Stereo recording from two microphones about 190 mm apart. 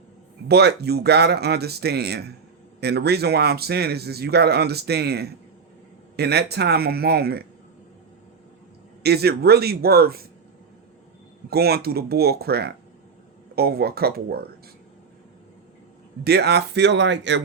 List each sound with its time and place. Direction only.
0.4 s speech: 60° right (ahead or behind)
9.0 s speech: 55° right (ahead or behind)
11.5 s speech: 55° right (ahead or behind)
16.2 s speech: 60° right (ahead or behind)